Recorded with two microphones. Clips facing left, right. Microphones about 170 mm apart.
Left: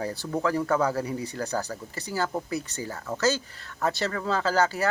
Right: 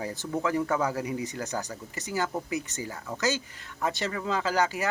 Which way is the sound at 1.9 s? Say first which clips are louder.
Left 1 dB; 35° left (ahead or behind).